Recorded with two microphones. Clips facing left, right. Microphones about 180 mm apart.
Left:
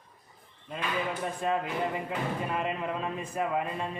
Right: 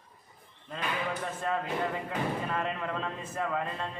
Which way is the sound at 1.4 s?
15° left (ahead or behind).